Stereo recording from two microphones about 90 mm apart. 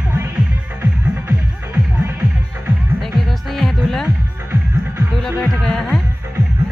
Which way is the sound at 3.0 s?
Centre (ahead or behind).